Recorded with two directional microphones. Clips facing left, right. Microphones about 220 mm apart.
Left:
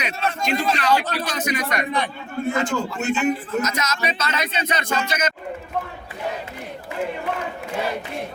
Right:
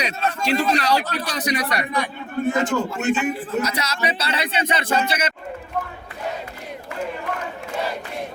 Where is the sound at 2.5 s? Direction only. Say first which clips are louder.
Right 2 dB; 20° right (ahead or behind).